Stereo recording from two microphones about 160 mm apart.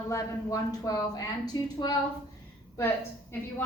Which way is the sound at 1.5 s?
30° left (ahead or behind).